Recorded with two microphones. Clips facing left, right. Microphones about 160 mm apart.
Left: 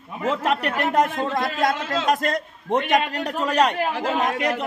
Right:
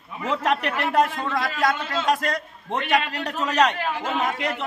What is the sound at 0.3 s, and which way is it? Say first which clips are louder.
Speech: left 1 dB; 10° left (ahead or behind).